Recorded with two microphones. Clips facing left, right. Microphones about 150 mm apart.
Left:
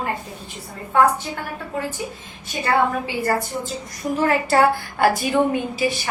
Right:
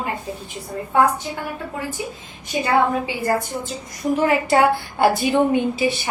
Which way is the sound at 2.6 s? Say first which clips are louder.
Right 1 dB; 15° right (ahead or behind).